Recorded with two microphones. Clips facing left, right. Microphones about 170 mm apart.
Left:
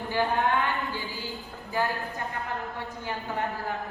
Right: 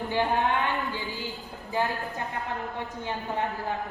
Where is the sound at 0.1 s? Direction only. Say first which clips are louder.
Even; 20° right (ahead or behind).